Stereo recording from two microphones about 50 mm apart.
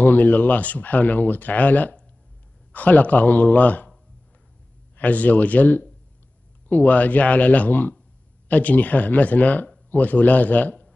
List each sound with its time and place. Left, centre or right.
0.0 s speech: left
4.9 s speech: left